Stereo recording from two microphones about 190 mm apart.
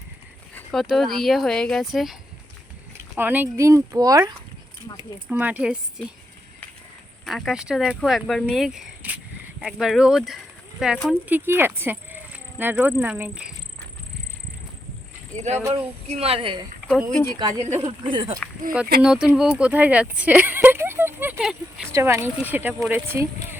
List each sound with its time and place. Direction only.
0.5 s speech: centre (ahead or behind)
3.2 s speech: 10° right (ahead or behind)
7.3 s speech: centre (ahead or behind)
15.4 s speech: 35° right (ahead or behind)
19.0 s speech: 5° right (ahead or behind)